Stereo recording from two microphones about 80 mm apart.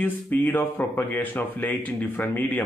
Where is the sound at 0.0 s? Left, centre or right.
Left.